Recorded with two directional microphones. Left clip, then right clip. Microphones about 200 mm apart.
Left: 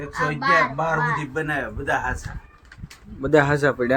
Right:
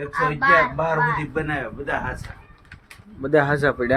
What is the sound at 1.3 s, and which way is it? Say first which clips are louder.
Speech: even; 20° left (ahead or behind).